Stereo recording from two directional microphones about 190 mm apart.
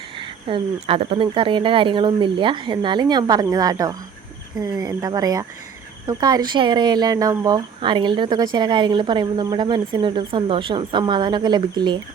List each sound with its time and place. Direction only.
0.2 s speech: 25° right (ahead or behind)